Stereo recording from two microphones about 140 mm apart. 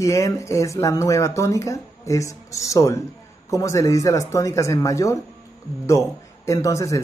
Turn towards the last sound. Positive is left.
turn(degrees=20)  # may be behind; listen again after turning